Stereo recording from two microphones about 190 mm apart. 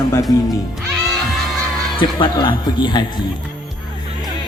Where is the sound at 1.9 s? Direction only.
25° left (ahead or behind).